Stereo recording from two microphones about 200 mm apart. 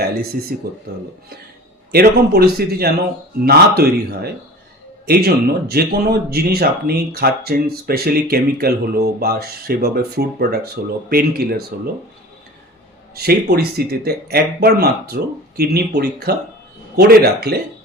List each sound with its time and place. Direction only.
0.5 s speech: 50° right (ahead or behind)
1.9 s speech: 50° right (ahead or behind)
13.2 s speech: 50° right (ahead or behind)